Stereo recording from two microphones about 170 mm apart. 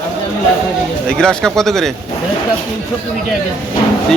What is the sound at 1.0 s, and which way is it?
Speech, 5° left (ahead or behind).